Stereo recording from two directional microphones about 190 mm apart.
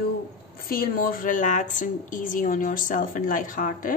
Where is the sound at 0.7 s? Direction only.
50° left (ahead or behind).